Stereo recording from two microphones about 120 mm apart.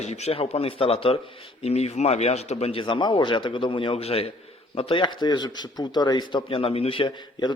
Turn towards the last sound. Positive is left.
turn(degrees=40)  # may be behind; listen again after turning